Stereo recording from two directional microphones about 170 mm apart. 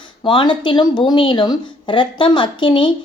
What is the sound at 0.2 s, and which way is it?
A woman's voice, 30° left (ahead or behind).